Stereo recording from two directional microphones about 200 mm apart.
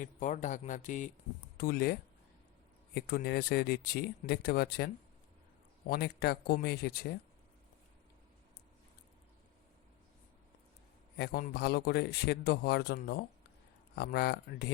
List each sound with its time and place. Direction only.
0.0 s speech: 40° left (ahead or behind)
1.5 s a man's voice: 50° left (ahead or behind)
5.9 s a man's voice: 55° left (ahead or behind)
11.2 s a man's voice: 50° left (ahead or behind)